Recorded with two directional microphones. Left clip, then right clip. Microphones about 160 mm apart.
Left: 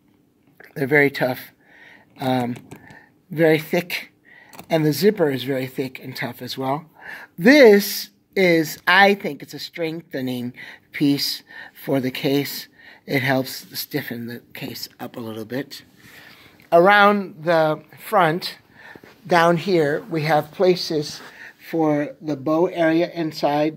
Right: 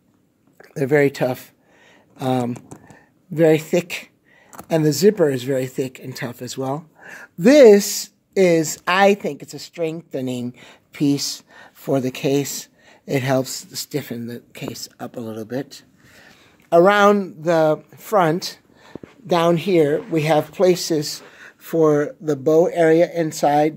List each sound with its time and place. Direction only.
0.6 s speech: 50° right (ahead or behind)
16.3 s speech: 55° right (ahead or behind)
22.4 s speech: 55° right (ahead or behind)